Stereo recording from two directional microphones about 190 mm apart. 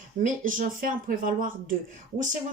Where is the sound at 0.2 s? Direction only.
45° right (ahead or behind).